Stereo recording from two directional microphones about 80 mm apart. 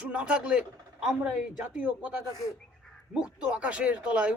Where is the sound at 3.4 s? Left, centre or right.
Centre.